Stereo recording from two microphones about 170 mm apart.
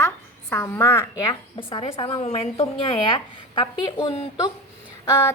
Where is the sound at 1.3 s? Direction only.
30° left (ahead or behind).